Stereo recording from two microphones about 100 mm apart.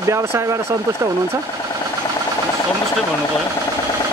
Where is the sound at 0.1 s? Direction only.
30° right (ahead or behind).